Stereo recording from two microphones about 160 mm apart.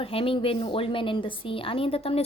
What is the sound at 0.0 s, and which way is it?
A woman's voice, 35° left (ahead or behind).